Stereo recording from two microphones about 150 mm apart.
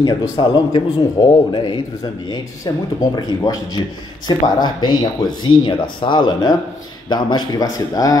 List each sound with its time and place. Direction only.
0.0 s a man's voice: 25° left (ahead or behind)